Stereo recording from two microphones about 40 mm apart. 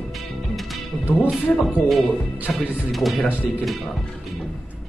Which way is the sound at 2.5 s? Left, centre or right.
Centre.